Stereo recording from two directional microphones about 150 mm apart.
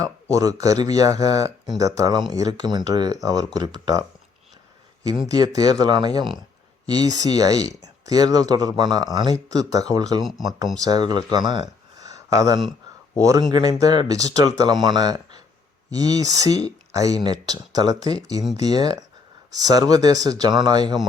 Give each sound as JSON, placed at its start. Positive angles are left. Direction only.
{"t": 0.0, "sound": "speech", "side_deg": -25}
{"t": 5.3, "sound": "speech", "side_deg": -25}
{"t": 11.9, "sound": "a sound", "side_deg": -25}
{"t": 13.1, "sound": "speech", "side_deg": -25}